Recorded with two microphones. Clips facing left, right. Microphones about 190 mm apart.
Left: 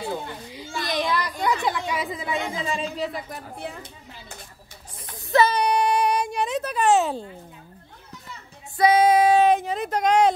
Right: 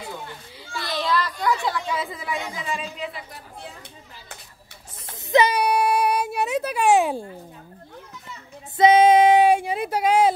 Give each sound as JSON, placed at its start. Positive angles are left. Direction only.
{"t": 0.8, "sound": "chatter", "side_deg": 15}
{"t": 3.1, "sound": "speech", "side_deg": 45}
{"t": 5.3, "sound": "speech", "side_deg": -15}
{"t": 8.7, "sound": "music", "side_deg": -25}
{"t": 9.4, "sound": "speech", "side_deg": -10}